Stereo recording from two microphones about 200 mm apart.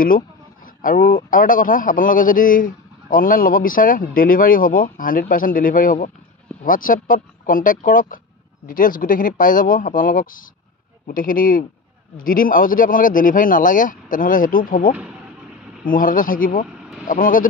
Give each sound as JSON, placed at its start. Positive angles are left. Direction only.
{"t": 0.8, "sound": "a man's voice", "side_deg": 50}